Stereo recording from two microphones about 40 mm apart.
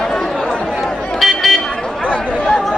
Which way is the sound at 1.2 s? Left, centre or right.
Centre.